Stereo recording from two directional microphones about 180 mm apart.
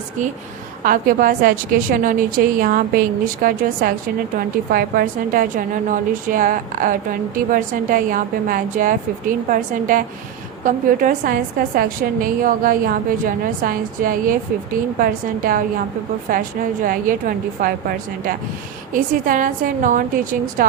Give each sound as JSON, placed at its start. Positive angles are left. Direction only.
{"t": 0.9, "sound": "a woman's voice", "side_deg": -50}